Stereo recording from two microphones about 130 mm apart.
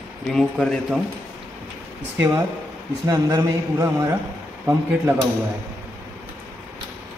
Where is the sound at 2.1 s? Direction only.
15° right (ahead or behind).